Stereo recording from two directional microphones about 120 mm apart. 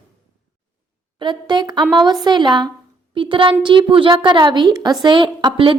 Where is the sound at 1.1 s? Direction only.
40° right (ahead or behind).